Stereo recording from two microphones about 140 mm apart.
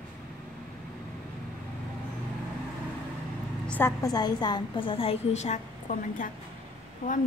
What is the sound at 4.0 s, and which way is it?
A woman's voice, 30° left (ahead or behind).